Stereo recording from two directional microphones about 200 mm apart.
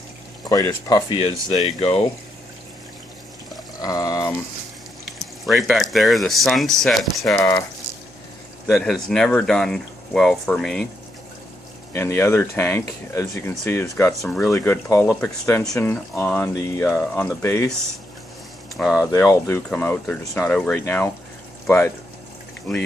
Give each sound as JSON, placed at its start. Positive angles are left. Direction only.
{"t": 0.9, "sound": "speech", "side_deg": 20}
{"t": 1.6, "sound": "speech", "side_deg": 30}
{"t": 3.8, "sound": "pour", "side_deg": 20}
{"t": 5.2, "sound": "speech", "side_deg": 0}
{"t": 7.3, "sound": "speech", "side_deg": 15}
{"t": 8.7, "sound": "speech", "side_deg": 0}
{"t": 11.9, "sound": "speech", "side_deg": 10}
{"t": 18.9, "sound": "speech", "side_deg": 15}